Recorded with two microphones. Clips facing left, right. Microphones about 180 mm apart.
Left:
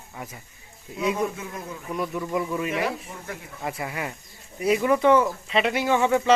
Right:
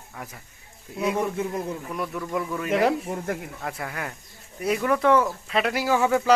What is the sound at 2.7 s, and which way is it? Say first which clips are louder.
Speech: right 5 dB; 70° right (ahead or behind).